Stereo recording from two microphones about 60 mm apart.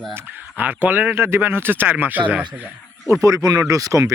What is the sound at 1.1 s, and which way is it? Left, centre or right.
Speech, right.